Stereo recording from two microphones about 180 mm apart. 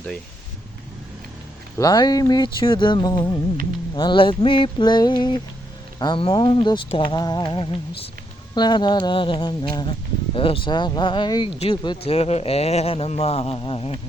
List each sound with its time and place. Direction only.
1.8 s speech: 20° left (ahead or behind)